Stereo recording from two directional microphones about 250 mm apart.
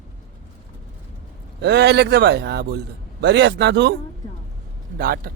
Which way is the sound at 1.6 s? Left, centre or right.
Right.